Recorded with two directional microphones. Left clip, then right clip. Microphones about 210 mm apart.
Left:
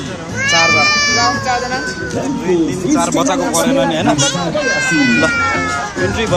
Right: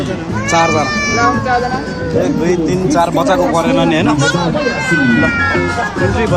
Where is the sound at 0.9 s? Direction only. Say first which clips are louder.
Left 2 dB; 50° left (ahead or behind).